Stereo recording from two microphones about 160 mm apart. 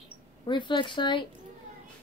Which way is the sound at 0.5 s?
30° left (ahead or behind).